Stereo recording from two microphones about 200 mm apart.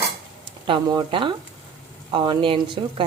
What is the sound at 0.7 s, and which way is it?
A woman's voice, 20° right (ahead or behind).